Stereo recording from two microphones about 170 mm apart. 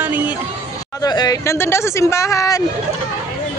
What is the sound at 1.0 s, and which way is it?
Speech, 25° left (ahead or behind).